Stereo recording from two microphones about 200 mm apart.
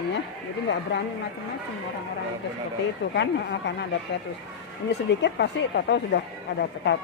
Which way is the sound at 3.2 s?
60° left (ahead or behind).